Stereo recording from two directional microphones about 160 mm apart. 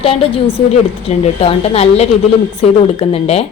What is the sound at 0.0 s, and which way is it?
A woman's voice, 35° left (ahead or behind).